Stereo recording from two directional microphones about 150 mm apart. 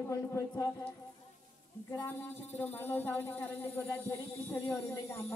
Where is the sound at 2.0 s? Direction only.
15° left (ahead or behind).